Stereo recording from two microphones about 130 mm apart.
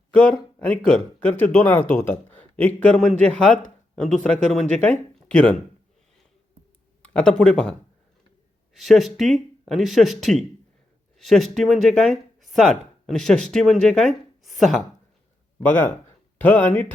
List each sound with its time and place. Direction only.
0.1 s speech: 10° left (ahead or behind)
7.0 s speech: 10° left (ahead or behind)
15.6 s speech: 15° left (ahead or behind)